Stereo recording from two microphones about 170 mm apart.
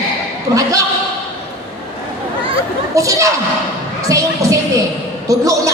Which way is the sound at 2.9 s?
20° right (ahead or behind).